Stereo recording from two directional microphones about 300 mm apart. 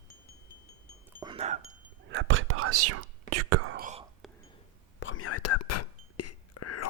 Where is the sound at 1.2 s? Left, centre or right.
Centre.